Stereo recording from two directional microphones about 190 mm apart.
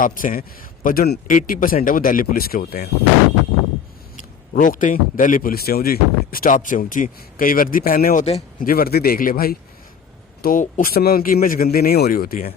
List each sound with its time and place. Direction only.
0.0 s speech: 45° left (ahead or behind)
4.5 s speech: 45° left (ahead or behind)
8.2 s speech: 35° left (ahead or behind)
8.6 s speech: 50° left (ahead or behind)